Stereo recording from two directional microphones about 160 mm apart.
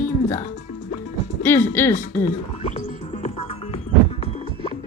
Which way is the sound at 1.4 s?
15° left (ahead or behind).